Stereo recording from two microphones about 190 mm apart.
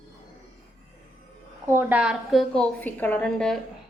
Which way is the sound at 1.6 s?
10° right (ahead or behind).